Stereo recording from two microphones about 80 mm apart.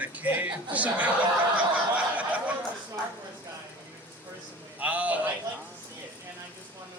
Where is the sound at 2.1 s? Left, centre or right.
Centre.